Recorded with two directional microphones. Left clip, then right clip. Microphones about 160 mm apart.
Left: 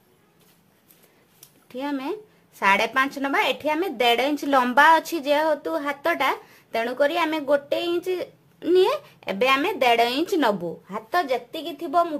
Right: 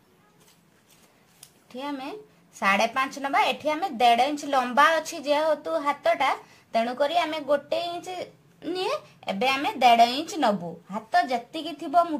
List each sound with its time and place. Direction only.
1.7 s a woman's voice: 50° left (ahead or behind)
9.2 s a woman's voice: 55° left (ahead or behind); by 11.6 s 70° left (ahead or behind)